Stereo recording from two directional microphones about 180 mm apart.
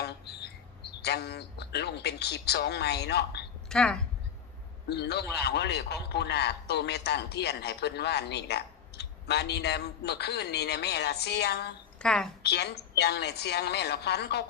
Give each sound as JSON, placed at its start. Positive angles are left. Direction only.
{"t": 0.0, "sound": "a sound", "side_deg": 65}
{"t": 1.0, "sound": "a man's voice", "side_deg": 65}
{"t": 3.7, "sound": "speech", "side_deg": 5}
{"t": 4.9, "sound": "a man's voice", "side_deg": 65}
{"t": 11.9, "sound": "a woman's voice", "side_deg": 5}
{"t": 12.4, "sound": "a man's voice", "side_deg": 65}